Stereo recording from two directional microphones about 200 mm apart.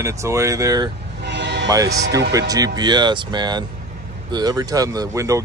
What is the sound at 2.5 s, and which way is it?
Speech, 20° right (ahead or behind).